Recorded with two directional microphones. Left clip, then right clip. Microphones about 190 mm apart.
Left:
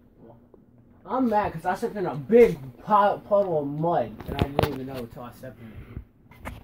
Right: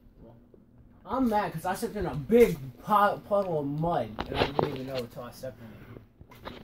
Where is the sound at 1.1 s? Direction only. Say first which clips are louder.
Left 4 dB; 25° right (ahead or behind).